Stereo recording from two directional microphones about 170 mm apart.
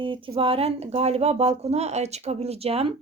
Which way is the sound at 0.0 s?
30° right (ahead or behind).